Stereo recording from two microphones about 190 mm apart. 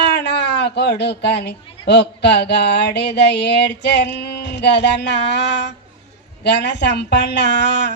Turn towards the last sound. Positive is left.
turn(degrees=65)  # may be behind; listen again after turning